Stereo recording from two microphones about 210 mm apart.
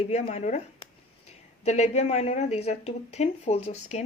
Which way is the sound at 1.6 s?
30° left (ahead or behind).